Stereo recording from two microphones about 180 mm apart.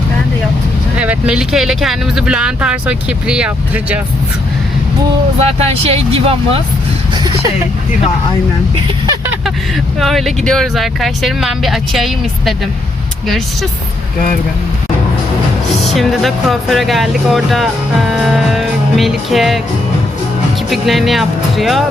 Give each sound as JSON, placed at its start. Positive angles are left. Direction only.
{"t": 0.9, "sound": "speech", "side_deg": -5}
{"t": 5.4, "sound": "speech", "side_deg": -35}
{"t": 9.0, "sound": "vehicle", "side_deg": -15}
{"t": 10.0, "sound": "speech", "side_deg": 0}
{"t": 15.9, "sound": "speech", "side_deg": 0}
{"t": 20.7, "sound": "speech", "side_deg": 0}